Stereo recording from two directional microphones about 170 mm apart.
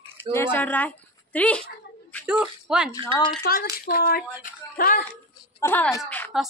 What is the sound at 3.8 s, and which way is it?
Speech, 65° left (ahead or behind).